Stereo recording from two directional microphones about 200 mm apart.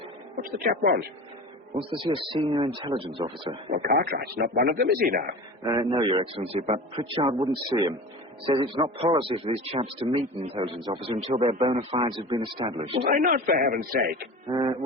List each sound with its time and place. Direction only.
0.3 s a man's voice: 45° right (ahead or behind)
1.9 s a man's voice: 25° right (ahead or behind)
3.7 s a man's voice: 45° right (ahead or behind)
5.6 s a man's voice: 20° right (ahead or behind)
13.1 s a man's voice: 45° right (ahead or behind)
14.5 s a man's voice: 25° right (ahead or behind)